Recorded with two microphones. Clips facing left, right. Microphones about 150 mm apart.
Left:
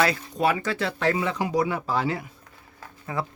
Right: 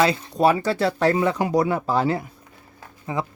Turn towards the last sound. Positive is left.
turn(degrees=-20)  # may be behind; listen again after turning